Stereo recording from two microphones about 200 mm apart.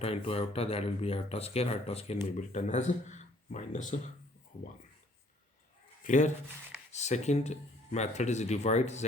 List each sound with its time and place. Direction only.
0.0 s speech: 30° left (ahead or behind)
6.0 s speech: 40° left (ahead or behind)